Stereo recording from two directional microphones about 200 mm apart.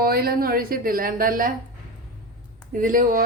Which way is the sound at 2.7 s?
40° right (ahead or behind).